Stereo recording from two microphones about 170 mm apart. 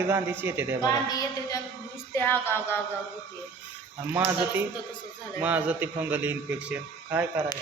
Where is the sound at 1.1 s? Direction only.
20° left (ahead or behind).